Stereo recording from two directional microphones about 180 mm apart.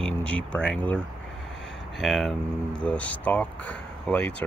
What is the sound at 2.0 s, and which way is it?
Speech, centre (ahead or behind).